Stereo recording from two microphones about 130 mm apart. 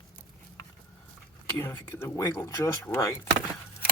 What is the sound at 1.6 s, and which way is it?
Speech, 20° left (ahead or behind).